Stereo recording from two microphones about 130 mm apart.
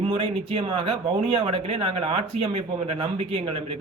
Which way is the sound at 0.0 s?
45° right (ahead or behind).